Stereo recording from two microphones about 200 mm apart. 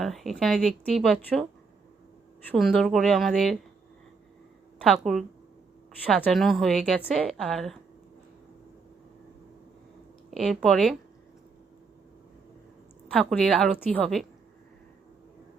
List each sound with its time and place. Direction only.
0.0 s a woman's voice: centre (ahead or behind)
2.5 s a woman's voice: 5° left (ahead or behind)
4.8 s a woman's voice: centre (ahead or behind)
10.3 s a woman's voice: centre (ahead or behind)
13.1 s a woman's voice: 5° left (ahead or behind)